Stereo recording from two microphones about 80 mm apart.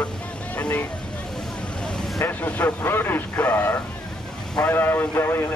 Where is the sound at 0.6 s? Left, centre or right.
Centre.